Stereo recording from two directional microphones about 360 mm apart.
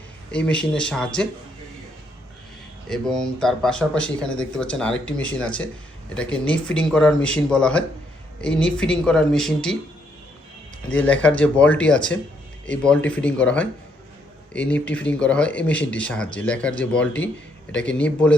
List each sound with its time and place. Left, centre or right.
0.3 s speech: centre
2.9 s speech: centre
10.8 s speech: centre